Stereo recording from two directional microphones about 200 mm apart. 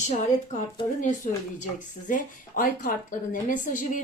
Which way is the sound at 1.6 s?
40° left (ahead or behind).